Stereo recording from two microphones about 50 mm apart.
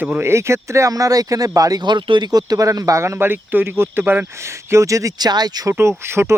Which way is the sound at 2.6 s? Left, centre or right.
Right.